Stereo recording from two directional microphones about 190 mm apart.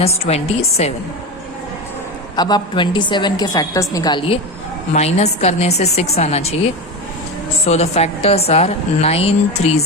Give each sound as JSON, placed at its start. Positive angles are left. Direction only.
{"t": 0.0, "sound": "a woman's voice", "side_deg": 30}
{"t": 2.3, "sound": "a woman's voice", "side_deg": 20}
{"t": 4.9, "sound": "a woman's voice", "side_deg": 35}
{"t": 7.7, "sound": "a woman's voice", "side_deg": 35}